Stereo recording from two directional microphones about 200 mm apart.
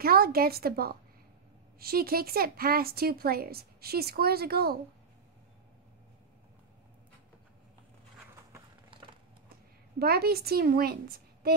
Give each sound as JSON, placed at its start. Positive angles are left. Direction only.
{"t": 0.0, "sound": "speech", "side_deg": -50}
{"t": 9.9, "sound": "speech", "side_deg": -50}